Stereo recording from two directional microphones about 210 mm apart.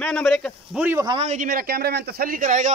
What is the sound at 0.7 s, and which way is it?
Speech, 10° right (ahead or behind).